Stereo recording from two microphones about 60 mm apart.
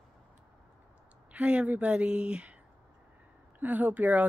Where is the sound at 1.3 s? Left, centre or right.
Right.